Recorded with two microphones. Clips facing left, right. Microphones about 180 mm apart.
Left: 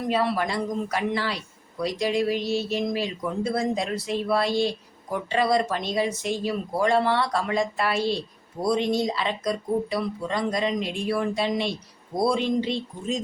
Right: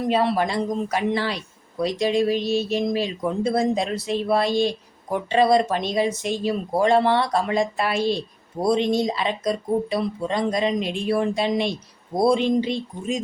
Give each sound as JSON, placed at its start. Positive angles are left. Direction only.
{"t": 0.1, "sound": "speech", "side_deg": -25}